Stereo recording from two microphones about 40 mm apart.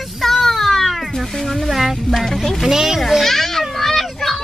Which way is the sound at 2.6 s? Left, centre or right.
Centre.